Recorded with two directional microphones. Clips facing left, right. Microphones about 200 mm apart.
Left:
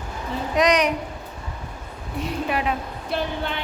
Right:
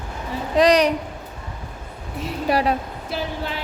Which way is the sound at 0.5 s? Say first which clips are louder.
Right 4 dB; 35° right (ahead or behind).